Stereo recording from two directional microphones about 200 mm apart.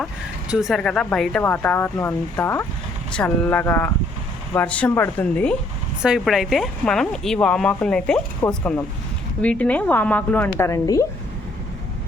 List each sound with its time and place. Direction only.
0.0 s speech: 5° right (ahead or behind); by 11.0 s 15° left (ahead or behind)